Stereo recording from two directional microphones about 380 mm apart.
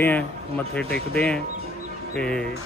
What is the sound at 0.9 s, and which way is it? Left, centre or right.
Speech, left.